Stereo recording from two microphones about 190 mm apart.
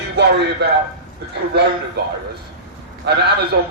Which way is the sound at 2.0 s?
60° right (ahead or behind).